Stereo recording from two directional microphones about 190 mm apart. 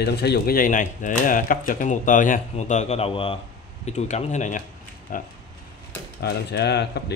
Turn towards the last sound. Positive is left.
turn(degrees=60)  # may be behind; listen again after turning